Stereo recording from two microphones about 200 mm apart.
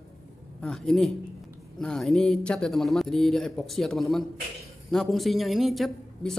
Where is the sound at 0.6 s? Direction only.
5° left (ahead or behind).